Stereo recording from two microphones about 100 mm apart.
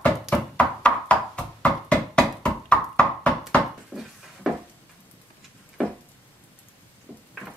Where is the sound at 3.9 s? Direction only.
10° right (ahead or behind).